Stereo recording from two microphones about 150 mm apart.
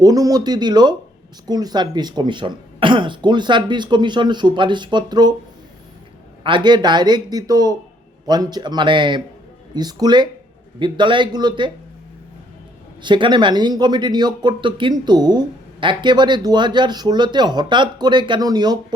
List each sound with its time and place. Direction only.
0.0 s speech: 25° right (ahead or behind)
6.4 s speech: 30° right (ahead or behind)
13.0 s speech: 30° right (ahead or behind)